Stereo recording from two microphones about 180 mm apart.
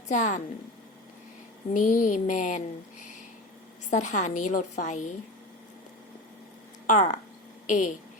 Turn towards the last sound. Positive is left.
turn(degrees=45)  # may be behind; listen again after turning